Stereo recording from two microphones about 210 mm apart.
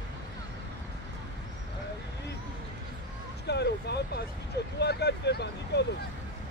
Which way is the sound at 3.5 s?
50° left (ahead or behind).